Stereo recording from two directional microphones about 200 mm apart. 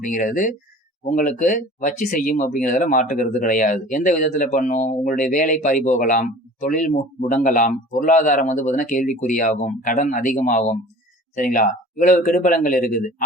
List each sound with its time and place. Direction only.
0.0 s speech: 40° left (ahead or behind)